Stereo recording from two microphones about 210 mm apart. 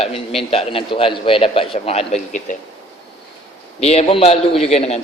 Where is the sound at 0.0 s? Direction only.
30° left (ahead or behind).